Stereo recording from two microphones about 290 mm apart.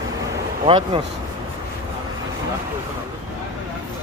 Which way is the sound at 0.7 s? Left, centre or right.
Centre.